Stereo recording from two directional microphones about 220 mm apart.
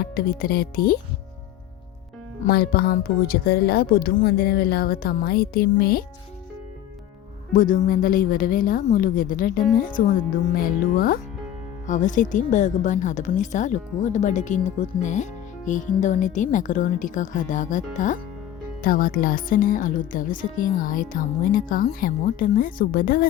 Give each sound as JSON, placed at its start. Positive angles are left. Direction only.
{"t": 0.0, "sound": "a woman's voice", "side_deg": 45}
{"t": 2.4, "sound": "a woman's voice", "side_deg": 45}
{"t": 7.5, "sound": "a woman's voice", "side_deg": 40}